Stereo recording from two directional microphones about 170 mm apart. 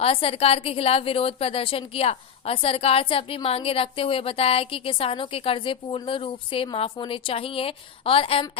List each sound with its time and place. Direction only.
0.0 s a woman's voice: 35° left (ahead or behind)